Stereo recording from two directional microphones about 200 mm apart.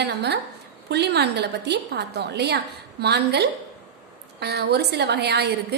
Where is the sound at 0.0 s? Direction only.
55° right (ahead or behind).